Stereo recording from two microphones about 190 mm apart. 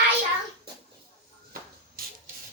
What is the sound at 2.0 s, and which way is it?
Printer, 50° right (ahead or behind).